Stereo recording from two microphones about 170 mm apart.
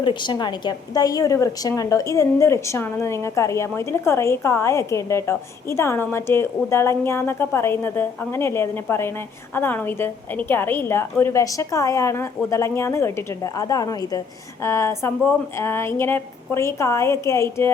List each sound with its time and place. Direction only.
0.0 s a woman's voice: 25° left (ahead or behind)